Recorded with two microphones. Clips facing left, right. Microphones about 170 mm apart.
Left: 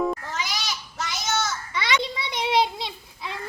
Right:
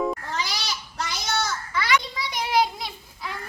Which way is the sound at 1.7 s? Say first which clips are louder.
Right 2 dB; 25° left (ahead or behind).